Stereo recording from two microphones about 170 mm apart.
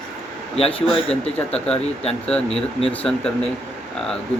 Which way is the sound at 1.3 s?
5° left (ahead or behind).